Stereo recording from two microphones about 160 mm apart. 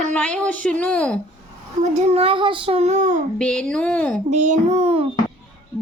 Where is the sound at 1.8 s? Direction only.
40° right (ahead or behind).